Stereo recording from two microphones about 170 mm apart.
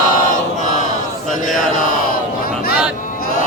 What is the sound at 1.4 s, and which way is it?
Mantra, 50° left (ahead or behind).